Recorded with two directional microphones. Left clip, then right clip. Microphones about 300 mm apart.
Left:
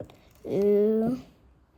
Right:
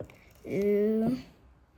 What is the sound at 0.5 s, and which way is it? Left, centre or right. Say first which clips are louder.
Speech: left 4 dB; centre.